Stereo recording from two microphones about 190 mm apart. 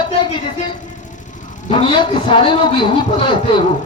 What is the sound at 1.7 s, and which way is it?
A man's voice, 30° left (ahead or behind).